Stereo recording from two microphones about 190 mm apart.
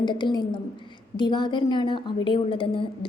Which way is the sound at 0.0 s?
25° left (ahead or behind).